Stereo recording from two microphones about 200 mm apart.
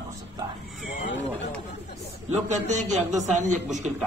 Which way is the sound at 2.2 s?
35° right (ahead or behind).